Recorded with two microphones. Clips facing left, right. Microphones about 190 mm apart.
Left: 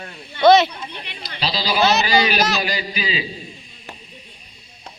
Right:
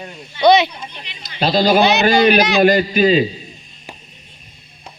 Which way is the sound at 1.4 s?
50° right (ahead or behind).